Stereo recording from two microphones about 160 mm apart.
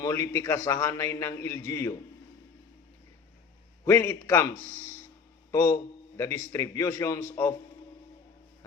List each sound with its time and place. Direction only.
0.0 s a man's voice: 20° left (ahead or behind)
3.8 s a man's voice: 15° left (ahead or behind)
5.5 s a man's voice: 25° left (ahead or behind)